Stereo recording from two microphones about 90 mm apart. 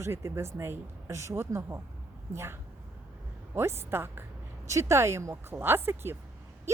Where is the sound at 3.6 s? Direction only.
25° right (ahead or behind).